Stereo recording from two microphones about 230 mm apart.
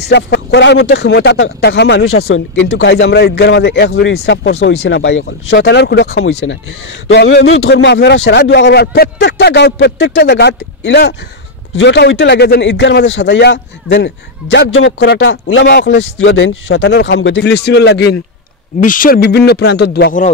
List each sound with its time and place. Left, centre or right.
0.0 s a man's voice: left
6.2 s a man's voice: left
18.8 s a man's voice: left